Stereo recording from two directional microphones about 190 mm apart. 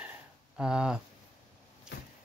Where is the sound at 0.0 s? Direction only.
5° right (ahead or behind).